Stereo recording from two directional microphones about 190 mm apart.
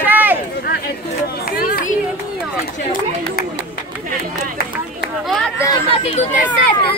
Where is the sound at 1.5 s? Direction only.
50° left (ahead or behind).